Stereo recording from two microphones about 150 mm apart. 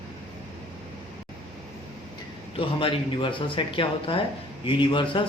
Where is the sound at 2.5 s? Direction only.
35° left (ahead or behind).